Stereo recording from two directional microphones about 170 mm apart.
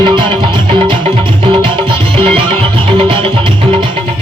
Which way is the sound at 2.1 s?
30° right (ahead or behind).